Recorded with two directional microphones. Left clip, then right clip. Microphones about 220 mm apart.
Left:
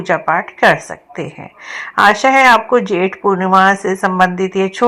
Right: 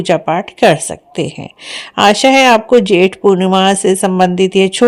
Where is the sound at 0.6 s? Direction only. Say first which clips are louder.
Right 3 dB; 55° right (ahead or behind).